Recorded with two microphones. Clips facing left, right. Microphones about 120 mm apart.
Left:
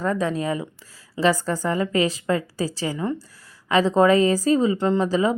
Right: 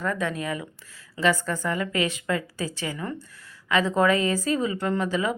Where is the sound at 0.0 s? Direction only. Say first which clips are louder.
Left 4 dB; 35° left (ahead or behind).